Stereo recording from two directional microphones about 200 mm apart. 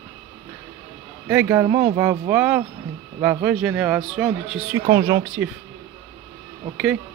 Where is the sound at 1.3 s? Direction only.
10° right (ahead or behind).